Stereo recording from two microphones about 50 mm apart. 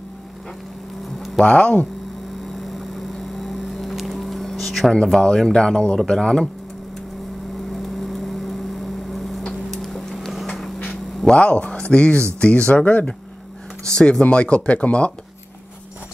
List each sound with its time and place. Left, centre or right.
1.4 s speech: left
2.6 s boat: centre
5.2 s speech: centre
7.7 s vehicle: centre
9.7 s vehicle: centre
11.3 s speech: left
13.8 s speech: centre